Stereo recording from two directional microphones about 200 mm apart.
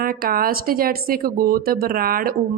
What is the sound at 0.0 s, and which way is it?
A woman's voice, 45° right (ahead or behind).